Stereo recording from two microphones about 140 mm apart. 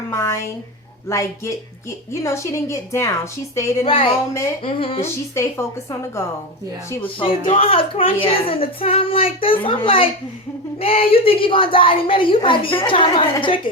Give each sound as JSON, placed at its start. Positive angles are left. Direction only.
{"t": 0.1, "sound": "speech", "side_deg": 20}
{"t": 3.8, "sound": "speech", "side_deg": 40}
{"t": 5.3, "sound": "speech", "side_deg": 20}
{"t": 7.0, "sound": "speech", "side_deg": 40}